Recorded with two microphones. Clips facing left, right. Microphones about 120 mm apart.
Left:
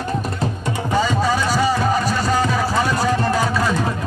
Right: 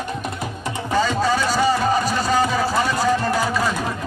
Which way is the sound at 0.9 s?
5° left (ahead or behind).